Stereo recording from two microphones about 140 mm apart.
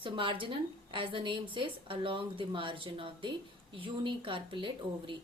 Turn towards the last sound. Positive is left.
turn(degrees=-35)  # may be behind; listen again after turning